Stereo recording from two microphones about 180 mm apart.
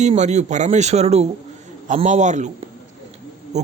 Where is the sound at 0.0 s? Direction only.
40° right (ahead or behind).